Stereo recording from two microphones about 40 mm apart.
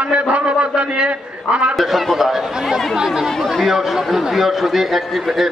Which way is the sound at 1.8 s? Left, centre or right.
Centre.